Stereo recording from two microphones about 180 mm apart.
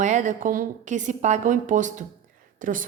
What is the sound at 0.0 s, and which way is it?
A woman's voice, 45° right (ahead or behind).